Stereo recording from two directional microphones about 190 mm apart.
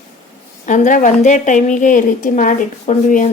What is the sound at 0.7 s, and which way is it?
A woman's voice, 45° left (ahead or behind).